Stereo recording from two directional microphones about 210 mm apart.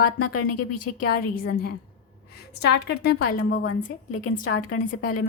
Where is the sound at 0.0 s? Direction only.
90° left.